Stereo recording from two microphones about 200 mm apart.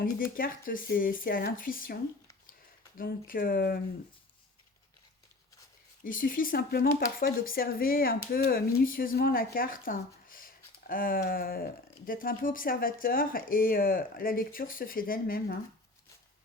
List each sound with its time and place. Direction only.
0.0 s speech: 45° left (ahead or behind)
3.0 s speech: 45° left (ahead or behind)
6.1 s speech: 45° left (ahead or behind)